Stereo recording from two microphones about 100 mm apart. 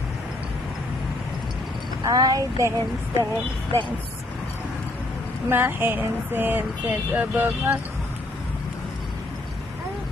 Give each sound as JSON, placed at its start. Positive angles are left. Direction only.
{"t": 2.0, "sound": "a woman's voice", "side_deg": -40}
{"t": 5.5, "sound": "speech", "side_deg": -20}